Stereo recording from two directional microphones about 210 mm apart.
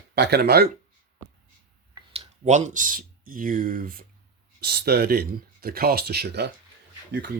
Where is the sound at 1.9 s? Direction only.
30° right (ahead or behind).